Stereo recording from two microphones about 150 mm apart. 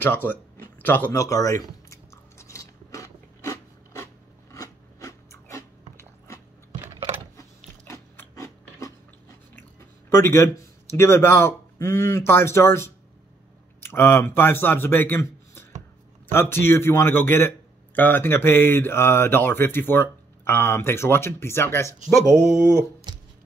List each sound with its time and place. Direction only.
0.0 s speech: 15° left (ahead or behind)
0.7 s chewing: 10° left (ahead or behind)
7.8 s gears: 20° left (ahead or behind)
10.0 s speech: 15° left (ahead or behind)